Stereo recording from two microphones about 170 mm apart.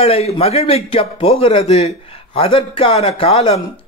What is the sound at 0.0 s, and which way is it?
A man's voice, 35° left (ahead or behind).